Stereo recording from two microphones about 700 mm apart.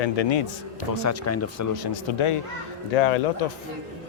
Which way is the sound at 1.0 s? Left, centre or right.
Left.